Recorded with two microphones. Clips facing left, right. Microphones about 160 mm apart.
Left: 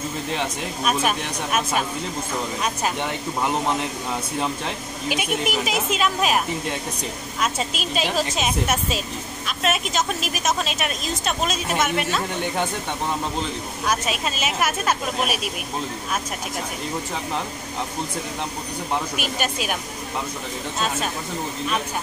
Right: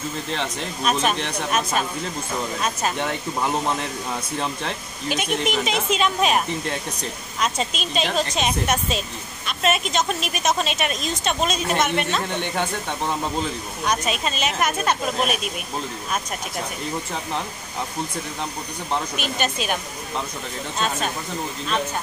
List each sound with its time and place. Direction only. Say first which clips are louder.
0.3 s speech: left 1 dB; 10° left (ahead or behind)
4.4 s speech: left 1 dB; 5° left (ahead or behind)
13.8 s speech: right 1 dB; 5° left (ahead or behind)
19.1 s speech: right 1 dB; 10° left (ahead or behind)